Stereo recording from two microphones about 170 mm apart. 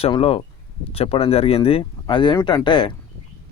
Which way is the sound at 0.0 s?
35° left (ahead or behind).